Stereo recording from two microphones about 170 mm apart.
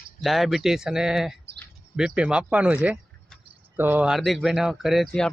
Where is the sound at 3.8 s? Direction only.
10° right (ahead or behind).